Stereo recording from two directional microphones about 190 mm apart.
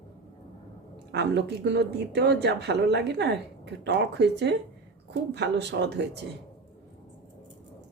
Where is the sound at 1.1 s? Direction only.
65° right (ahead or behind).